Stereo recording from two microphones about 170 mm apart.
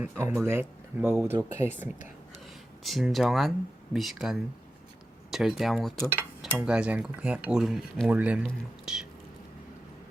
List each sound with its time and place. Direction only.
0.0 s speech: 10° right (ahead or behind)
2.8 s speech: centre (ahead or behind)